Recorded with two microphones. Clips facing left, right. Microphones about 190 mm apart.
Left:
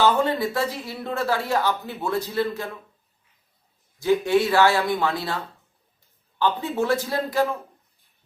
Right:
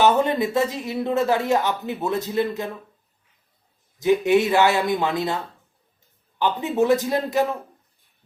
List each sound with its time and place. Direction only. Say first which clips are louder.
0.0 s speech: right 2 dB; 20° right (ahead or behind)
4.0 s speech: right 2 dB; 20° right (ahead or behind)
6.4 s speech: right 3 dB; 20° right (ahead or behind)